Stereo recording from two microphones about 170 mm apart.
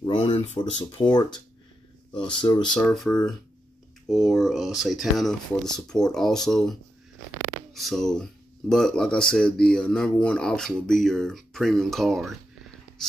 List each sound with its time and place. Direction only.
0.0 s speech: 35° left (ahead or behind)
2.4 s speech: 25° left (ahead or behind)
2.7 s speech: 5° left (ahead or behind)